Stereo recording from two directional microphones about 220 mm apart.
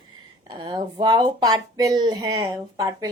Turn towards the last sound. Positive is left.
turn(degrees=-15)  # may be behind; listen again after turning